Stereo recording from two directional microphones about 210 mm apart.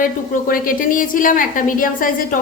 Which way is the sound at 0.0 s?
40° left (ahead or behind).